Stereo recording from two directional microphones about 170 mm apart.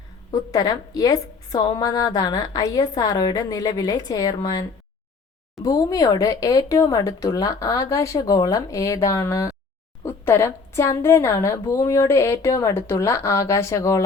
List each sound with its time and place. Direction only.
0.3 s a woman's voice: 20° left (ahead or behind)